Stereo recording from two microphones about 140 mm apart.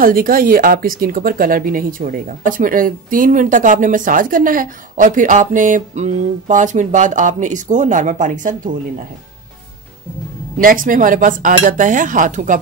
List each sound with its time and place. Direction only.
0.0 s speech: 90° right; by 8.7 s 65° right (ahead or behind)
10.6 s speech: 75° right (ahead or behind)